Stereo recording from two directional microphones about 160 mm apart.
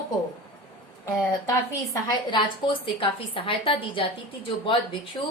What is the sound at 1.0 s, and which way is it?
A woman's voice, 20° left (ahead or behind).